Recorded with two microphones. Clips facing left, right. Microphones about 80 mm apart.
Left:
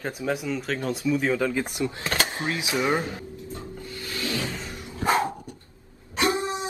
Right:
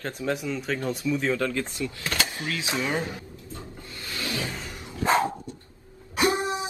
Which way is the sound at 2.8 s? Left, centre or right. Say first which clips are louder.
Left 6 dB; left.